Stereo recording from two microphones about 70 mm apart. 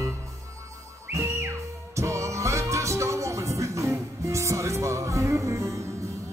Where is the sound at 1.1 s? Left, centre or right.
Right.